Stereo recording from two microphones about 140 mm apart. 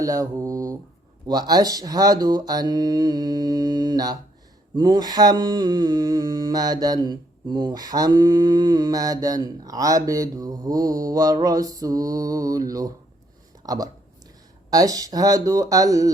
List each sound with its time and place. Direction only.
0.0 s mantra: 25° right (ahead or behind)
13.6 s speech: 25° right (ahead or behind)
14.7 s mantra: 25° right (ahead or behind)